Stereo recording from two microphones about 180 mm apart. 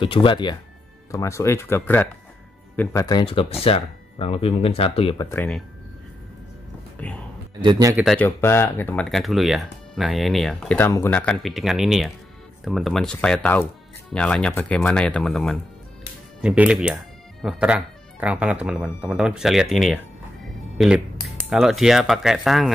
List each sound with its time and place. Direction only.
0.0 s speech: 30° left (ahead or behind)
5.3 s speech: 10° left (ahead or behind)
7.0 s speech: 5° left (ahead or behind)
7.6 s speech: 25° right (ahead or behind)
7.9 s speech: centre (ahead or behind)
8.2 s speech: 15° left (ahead or behind)